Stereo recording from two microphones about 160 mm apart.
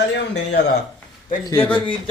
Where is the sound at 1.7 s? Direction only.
30° left (ahead or behind).